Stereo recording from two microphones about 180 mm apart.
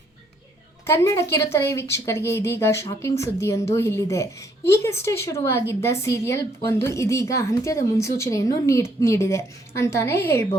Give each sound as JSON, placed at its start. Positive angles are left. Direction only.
{"t": 0.9, "sound": "speech", "side_deg": 15}